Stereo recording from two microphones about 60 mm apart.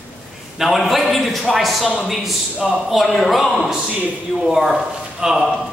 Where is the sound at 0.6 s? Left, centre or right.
Centre.